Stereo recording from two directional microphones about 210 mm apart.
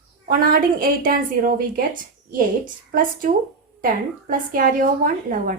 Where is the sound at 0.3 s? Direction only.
45° right (ahead or behind).